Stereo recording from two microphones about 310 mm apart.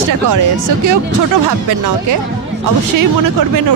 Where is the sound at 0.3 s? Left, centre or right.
Right.